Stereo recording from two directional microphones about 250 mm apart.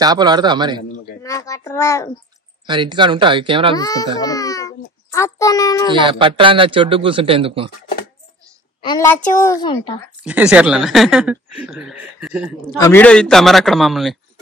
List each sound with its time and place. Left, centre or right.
0.0 s a man's voice: centre
1.2 s a woman's voice: centre
2.6 s a man's voice: centre
3.7 s a woman's voice: centre
5.9 s a man's voice: centre
8.8 s a woman's voice: centre
10.2 s speech: centre
12.7 s speech: centre